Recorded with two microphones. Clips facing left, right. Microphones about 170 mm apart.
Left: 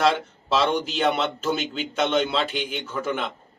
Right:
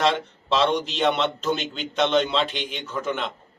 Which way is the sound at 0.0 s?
5° left (ahead or behind).